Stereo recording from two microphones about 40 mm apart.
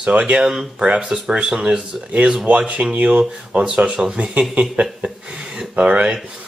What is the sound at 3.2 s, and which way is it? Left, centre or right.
Speech, right.